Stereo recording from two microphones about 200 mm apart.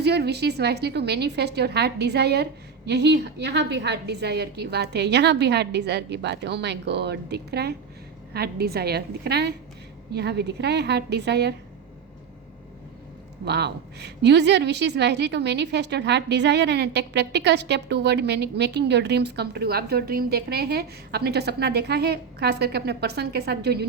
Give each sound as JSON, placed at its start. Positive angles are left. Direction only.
{"t": 0.0, "sound": "a woman's voice", "side_deg": -55}
{"t": 13.4, "sound": "a woman's voice", "side_deg": -55}